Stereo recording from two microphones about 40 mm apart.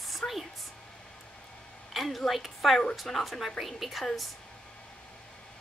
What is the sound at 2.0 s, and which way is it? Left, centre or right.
A woman's voice, centre.